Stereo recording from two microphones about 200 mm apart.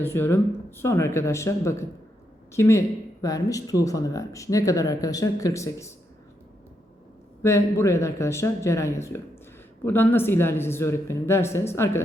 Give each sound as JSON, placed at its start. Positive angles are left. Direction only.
{"t": 0.0, "sound": "speech", "side_deg": 10}
{"t": 7.4, "sound": "speech", "side_deg": 15}